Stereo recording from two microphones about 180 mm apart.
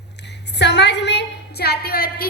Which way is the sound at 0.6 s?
70° left (ahead or behind).